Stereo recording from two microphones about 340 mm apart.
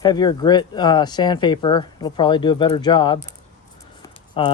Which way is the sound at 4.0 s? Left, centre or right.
Centre.